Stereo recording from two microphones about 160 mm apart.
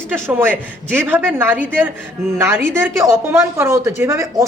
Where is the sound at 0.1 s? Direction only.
15° right (ahead or behind).